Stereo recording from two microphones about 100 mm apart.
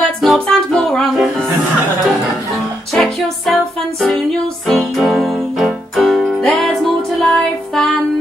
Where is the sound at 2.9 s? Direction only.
5° left (ahead or behind).